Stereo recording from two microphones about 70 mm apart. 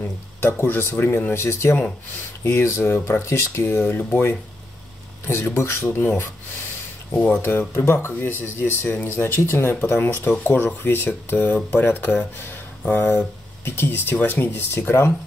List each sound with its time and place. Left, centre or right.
0.0 s speech: left
7.5 s speech: left
10.6 s speech: left
13.7 s speech: left